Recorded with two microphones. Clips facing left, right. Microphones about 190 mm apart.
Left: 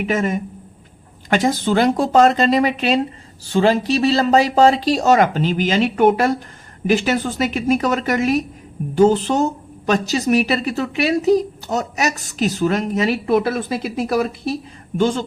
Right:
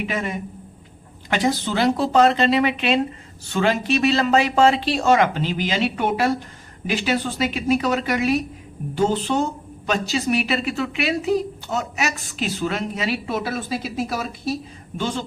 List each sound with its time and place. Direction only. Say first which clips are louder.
0.0 s speech: left 6 dB; 45° left (ahead or behind)